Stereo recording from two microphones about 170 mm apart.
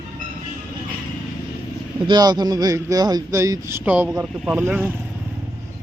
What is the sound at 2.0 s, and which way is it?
Speech, 25° right (ahead or behind).